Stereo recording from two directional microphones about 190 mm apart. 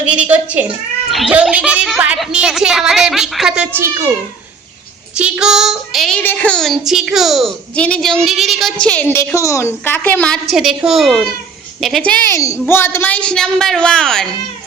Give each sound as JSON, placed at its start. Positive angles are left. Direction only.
{"t": 0.0, "sound": "cat", "side_deg": -5}
{"t": 1.1, "sound": "speech", "side_deg": -5}
{"t": 5.1, "sound": "speech", "side_deg": -5}
{"t": 12.2, "sound": "a child's voice", "side_deg": 15}